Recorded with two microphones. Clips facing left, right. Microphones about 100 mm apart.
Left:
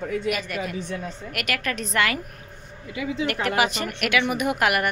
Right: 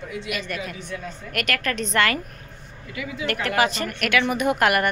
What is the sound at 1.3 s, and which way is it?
Speech, 10° left (ahead or behind).